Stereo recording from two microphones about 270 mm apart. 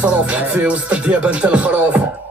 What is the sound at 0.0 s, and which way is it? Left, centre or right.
Speech, centre.